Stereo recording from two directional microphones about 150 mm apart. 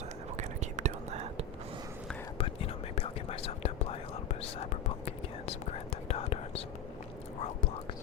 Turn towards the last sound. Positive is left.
turn(degrees=40)  # may be behind; listen again after turning